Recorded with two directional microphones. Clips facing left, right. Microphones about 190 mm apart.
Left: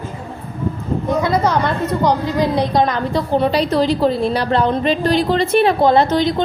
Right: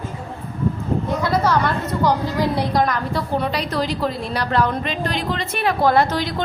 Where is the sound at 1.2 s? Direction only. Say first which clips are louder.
Even; 20° left (ahead or behind).